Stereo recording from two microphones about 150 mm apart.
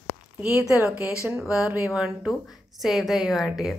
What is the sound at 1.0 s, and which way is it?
Speech, 20° left (ahead or behind).